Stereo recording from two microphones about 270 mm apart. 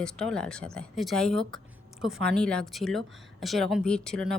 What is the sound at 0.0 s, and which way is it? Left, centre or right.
Speech, centre.